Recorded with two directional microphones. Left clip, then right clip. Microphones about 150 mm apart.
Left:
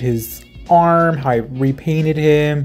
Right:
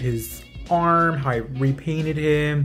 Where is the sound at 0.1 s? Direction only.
Centre (ahead or behind).